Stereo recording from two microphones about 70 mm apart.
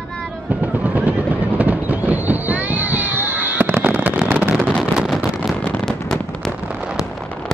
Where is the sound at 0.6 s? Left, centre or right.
Right.